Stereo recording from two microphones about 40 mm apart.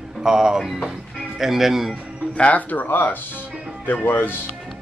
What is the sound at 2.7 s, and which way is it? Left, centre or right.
Speech, left.